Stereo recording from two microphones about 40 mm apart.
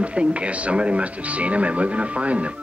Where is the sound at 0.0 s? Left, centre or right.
Right.